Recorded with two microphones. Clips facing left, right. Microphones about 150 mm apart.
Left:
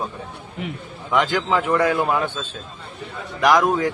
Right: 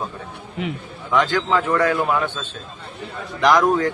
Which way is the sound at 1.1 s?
15° left (ahead or behind).